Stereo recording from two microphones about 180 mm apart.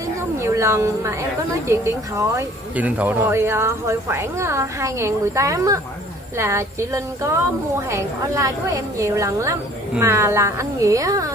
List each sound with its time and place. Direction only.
0.4 s a woman's voice: 15° right (ahead or behind)